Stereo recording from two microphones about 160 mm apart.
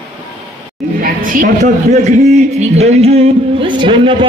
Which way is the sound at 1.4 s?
45° right (ahead or behind).